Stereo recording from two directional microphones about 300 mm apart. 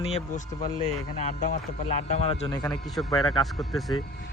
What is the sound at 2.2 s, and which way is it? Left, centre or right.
Speech, centre.